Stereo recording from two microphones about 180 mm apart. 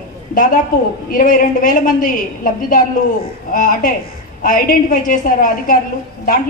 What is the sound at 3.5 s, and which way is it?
A woman's voice, 50° left (ahead or behind).